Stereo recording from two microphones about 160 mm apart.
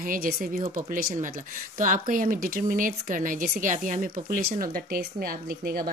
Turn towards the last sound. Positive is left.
turn(degrees=-70)  # may be behind; listen again after turning